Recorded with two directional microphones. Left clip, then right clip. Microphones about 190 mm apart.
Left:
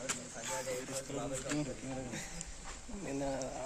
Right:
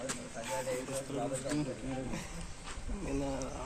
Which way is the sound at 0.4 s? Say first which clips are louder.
Right 3 dB; 55° left (ahead or behind).